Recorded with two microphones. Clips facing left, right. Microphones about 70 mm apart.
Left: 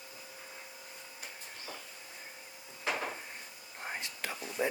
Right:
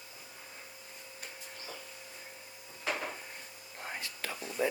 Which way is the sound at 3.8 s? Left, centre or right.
Left.